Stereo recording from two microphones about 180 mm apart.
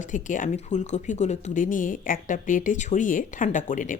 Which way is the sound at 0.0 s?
45° left (ahead or behind).